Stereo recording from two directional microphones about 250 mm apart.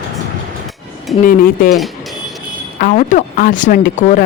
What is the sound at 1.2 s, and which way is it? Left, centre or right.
Speech, left.